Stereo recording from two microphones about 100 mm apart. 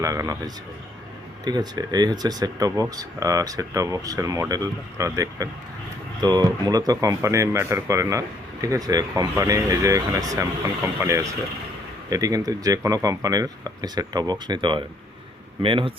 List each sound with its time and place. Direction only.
0.0 s speech: 35° right (ahead or behind)
6.2 s speech: 45° right (ahead or behind); by 15.9 s 60° right (ahead or behind)